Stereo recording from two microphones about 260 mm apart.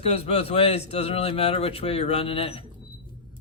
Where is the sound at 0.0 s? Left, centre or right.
Left.